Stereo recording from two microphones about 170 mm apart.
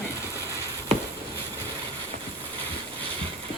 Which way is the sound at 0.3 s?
20° right (ahead or behind).